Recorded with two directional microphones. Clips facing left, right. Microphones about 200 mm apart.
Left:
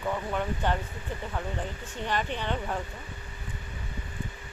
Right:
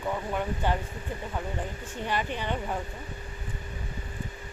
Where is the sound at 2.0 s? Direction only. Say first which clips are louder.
Even; 10° right (ahead or behind).